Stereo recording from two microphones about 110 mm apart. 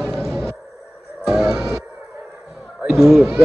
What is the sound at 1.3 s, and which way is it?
Music, 5° right (ahead or behind).